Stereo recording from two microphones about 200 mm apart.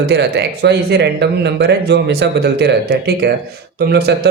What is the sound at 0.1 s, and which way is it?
Speech, 55° right (ahead or behind).